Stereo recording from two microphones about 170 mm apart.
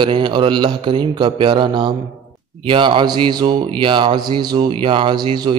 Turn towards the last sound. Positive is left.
turn(degrees=-25)  # may be behind; listen again after turning